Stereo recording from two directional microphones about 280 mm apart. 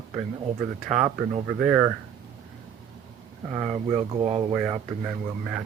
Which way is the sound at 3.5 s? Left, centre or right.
Right.